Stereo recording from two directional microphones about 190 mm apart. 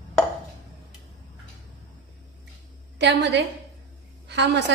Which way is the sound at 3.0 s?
65° right (ahead or behind).